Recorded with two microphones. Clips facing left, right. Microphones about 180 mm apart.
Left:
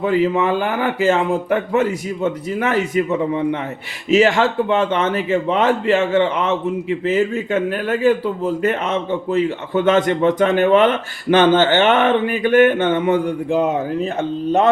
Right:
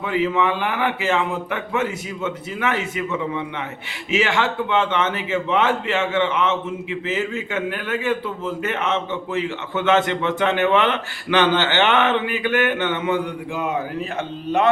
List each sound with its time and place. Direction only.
0.3 s speech: 40° left (ahead or behind)